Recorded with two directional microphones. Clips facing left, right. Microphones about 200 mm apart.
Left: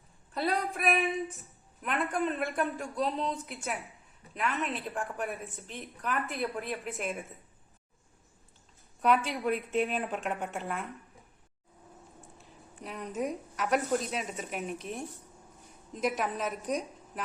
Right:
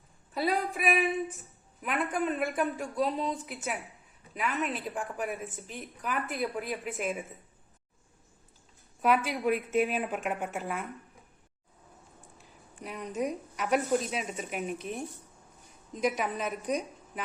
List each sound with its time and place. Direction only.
0.3 s a woman's voice: centre (ahead or behind)
9.0 s a woman's voice: centre (ahead or behind)
12.4 s a woman's voice: centre (ahead or behind)